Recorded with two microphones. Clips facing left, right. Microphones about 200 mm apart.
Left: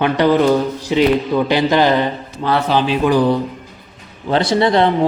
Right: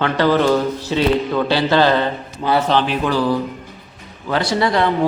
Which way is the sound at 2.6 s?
10° left (ahead or behind).